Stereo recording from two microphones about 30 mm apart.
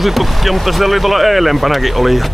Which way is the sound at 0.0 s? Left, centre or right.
Centre.